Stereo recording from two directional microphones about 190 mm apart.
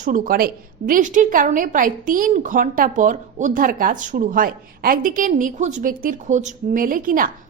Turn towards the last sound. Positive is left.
turn(degrees=-45)  # may be behind; listen again after turning